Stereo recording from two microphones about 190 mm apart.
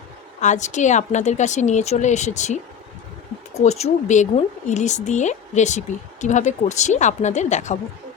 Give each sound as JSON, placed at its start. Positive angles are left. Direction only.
{"t": 0.3, "sound": "speech", "side_deg": 40}